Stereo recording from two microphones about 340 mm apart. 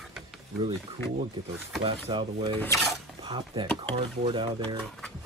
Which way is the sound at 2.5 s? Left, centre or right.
Centre.